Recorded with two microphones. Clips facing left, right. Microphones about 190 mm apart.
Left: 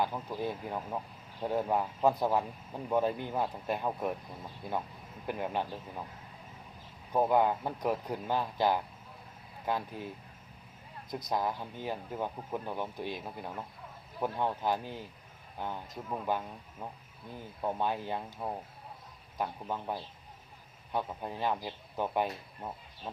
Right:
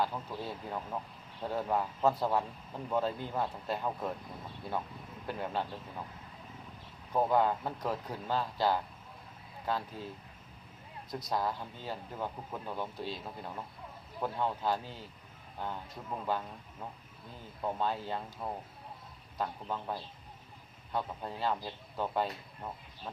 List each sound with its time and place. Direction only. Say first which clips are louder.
0.0 s speech: left 2 dB; 15° left (ahead or behind)
5.2 s speech: left 2 dB; 15° left (ahead or behind)
7.1 s speech: left 2 dB; 15° left (ahead or behind)
11.1 s speech: left 1 dB; 15° left (ahead or behind)